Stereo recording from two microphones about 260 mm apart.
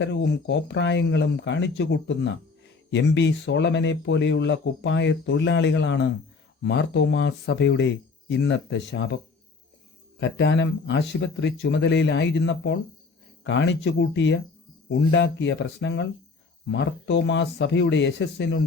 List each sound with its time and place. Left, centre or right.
0.0 s speech: left
10.2 s speech: left